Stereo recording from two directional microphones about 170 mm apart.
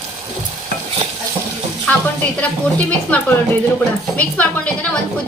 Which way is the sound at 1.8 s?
10° left (ahead or behind).